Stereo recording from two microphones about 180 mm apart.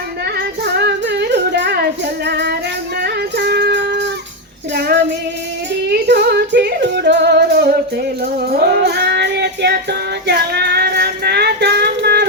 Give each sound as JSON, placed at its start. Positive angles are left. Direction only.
{"t": 0.3, "sound": "music", "side_deg": -65}
{"t": 3.0, "sound": "a sound", "side_deg": -65}
{"t": 4.7, "sound": "child singing", "side_deg": -65}
{"t": 5.9, "sound": "music", "side_deg": -65}
{"t": 8.2, "sound": "child singing", "side_deg": -60}